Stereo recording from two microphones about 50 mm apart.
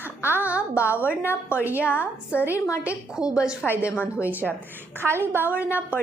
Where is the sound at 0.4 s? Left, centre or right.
Right.